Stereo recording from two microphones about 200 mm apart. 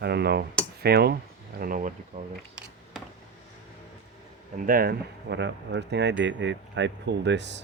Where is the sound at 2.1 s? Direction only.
35° right (ahead or behind).